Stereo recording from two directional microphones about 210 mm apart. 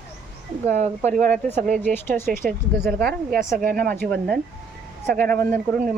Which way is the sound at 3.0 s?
50° right (ahead or behind).